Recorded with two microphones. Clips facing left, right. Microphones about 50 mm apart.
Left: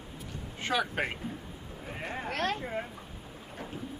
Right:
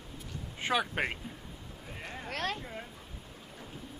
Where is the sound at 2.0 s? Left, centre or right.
Left.